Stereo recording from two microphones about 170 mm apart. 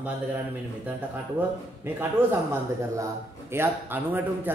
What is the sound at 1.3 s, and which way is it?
Speech, 10° right (ahead or behind).